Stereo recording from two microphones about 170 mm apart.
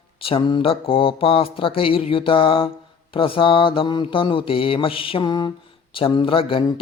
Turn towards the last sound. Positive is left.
turn(degrees=30)  # may be behind; listen again after turning